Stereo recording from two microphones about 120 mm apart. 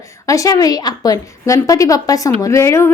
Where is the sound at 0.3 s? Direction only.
30° left (ahead or behind).